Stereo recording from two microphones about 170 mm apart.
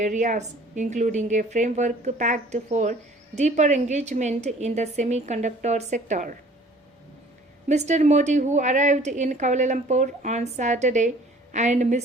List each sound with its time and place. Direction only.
0.0 s a woman's voice: 45° right (ahead or behind)
7.7 s a woman's voice: 45° right (ahead or behind)